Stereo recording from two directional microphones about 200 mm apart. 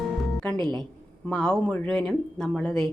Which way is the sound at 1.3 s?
5° left (ahead or behind).